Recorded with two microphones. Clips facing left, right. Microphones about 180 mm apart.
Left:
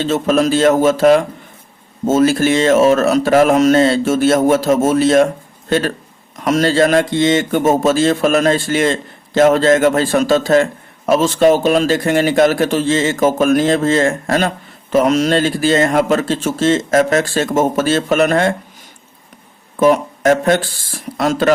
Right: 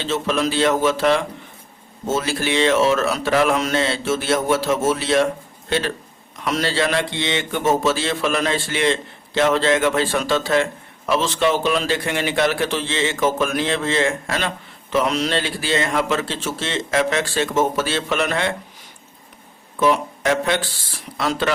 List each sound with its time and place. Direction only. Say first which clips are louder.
0.0 s speech: left 7 dB; 45° left (ahead or behind)
19.8 s speech: left 6 dB; 45° left (ahead or behind)